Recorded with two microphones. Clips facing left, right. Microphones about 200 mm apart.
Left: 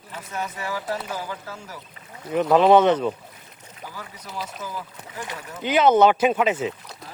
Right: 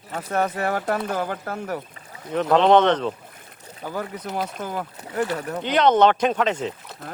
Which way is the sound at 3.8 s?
55° right (ahead or behind).